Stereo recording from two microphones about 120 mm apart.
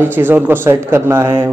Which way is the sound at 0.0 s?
15° right (ahead or behind).